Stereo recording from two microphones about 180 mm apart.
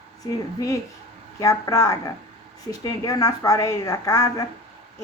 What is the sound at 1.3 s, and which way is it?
A woman's voice, 15° left (ahead or behind).